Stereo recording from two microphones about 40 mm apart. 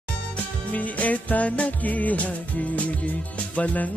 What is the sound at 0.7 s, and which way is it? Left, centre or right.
Music, left.